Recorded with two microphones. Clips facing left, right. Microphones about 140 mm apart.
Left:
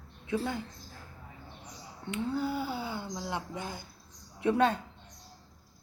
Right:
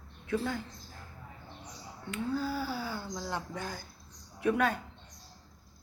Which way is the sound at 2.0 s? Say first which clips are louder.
Left 1 dB; 20° left (ahead or behind).